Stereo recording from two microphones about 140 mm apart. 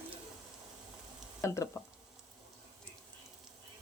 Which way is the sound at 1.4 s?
20° left (ahead or behind).